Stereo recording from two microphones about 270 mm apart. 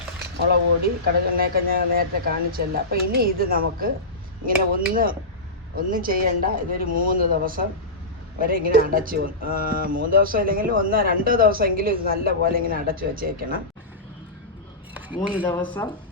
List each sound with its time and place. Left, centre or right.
1.0 s speech: right
15.4 s speech: centre